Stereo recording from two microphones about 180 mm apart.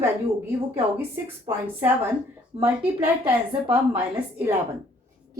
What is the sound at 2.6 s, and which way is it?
A woman's voice, 10° right (ahead or behind).